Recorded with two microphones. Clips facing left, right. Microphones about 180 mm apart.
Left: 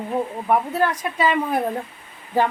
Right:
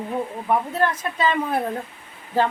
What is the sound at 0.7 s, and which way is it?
Speech, 10° left (ahead or behind).